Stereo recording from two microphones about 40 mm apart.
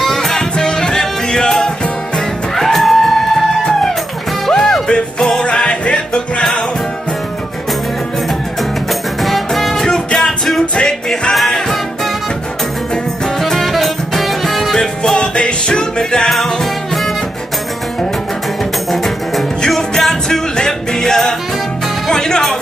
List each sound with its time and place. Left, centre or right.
0.0 s music: centre
2.5 s music: centre
4.5 s music: centre; by 6.4 s left
9.2 s music: centre
9.8 s music: centre
10.2 s music: centre
13.4 s music: centre
14.8 s music: centre
18.9 s music: centre